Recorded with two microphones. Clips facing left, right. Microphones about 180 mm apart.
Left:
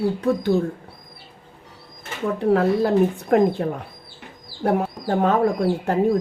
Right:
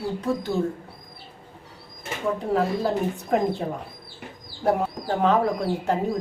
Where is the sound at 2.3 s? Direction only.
65° left (ahead or behind).